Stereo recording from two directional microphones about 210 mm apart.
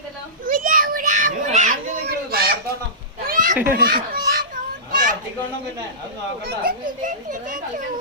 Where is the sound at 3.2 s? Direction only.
40° right (ahead or behind).